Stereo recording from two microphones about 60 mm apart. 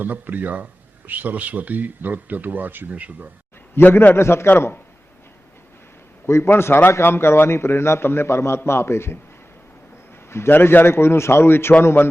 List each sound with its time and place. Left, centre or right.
0.0 s speech: right
3.8 s a man's voice: left
4.1 s a man's voice: left
6.2 s a man's voice: left
10.2 s a man's voice: left